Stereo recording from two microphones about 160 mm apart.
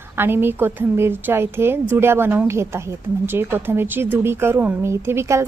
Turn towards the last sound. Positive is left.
turn(degrees=-15)  # may be behind; listen again after turning